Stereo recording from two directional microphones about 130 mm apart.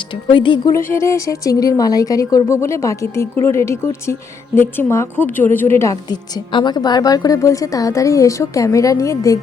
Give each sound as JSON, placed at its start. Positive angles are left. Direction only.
{"t": 0.1, "sound": "speech", "side_deg": 40}
{"t": 0.9, "sound": "a woman's voice", "side_deg": 20}
{"t": 5.7, "sound": "a woman's voice", "side_deg": 25}